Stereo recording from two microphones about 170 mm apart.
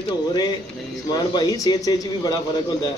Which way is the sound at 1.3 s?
25° left (ahead or behind).